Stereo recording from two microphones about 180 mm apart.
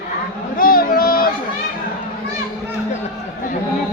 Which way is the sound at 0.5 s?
55° left (ahead or behind).